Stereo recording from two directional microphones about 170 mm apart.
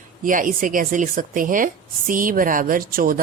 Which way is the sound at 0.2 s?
50° right (ahead or behind).